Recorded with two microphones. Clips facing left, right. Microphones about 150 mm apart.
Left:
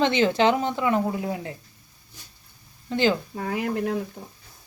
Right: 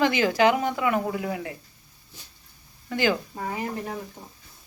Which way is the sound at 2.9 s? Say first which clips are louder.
Left 2 dB; 25° left (ahead or behind).